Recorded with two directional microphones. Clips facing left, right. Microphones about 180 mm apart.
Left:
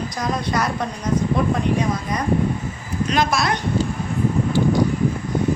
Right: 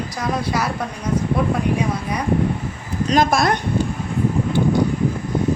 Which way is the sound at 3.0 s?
45° right (ahead or behind).